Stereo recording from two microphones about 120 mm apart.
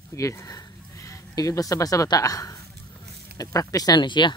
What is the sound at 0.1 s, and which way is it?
Speech, 25° left (ahead or behind).